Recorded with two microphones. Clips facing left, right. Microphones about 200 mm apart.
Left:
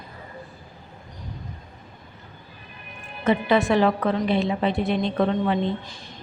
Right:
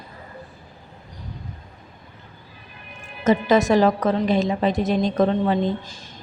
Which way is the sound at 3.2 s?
40° right (ahead or behind).